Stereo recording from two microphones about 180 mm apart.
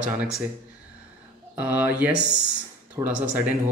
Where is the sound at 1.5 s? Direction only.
10° right (ahead or behind).